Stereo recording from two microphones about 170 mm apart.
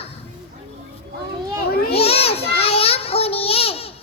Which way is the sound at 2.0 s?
35° left (ahead or behind).